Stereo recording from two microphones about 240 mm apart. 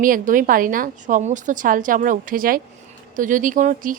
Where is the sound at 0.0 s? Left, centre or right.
Right.